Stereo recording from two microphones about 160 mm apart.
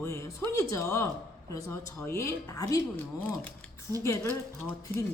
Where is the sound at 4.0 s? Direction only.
15° left (ahead or behind).